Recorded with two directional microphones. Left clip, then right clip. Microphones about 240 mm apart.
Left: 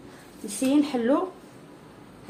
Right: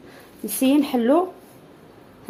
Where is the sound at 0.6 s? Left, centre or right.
Right.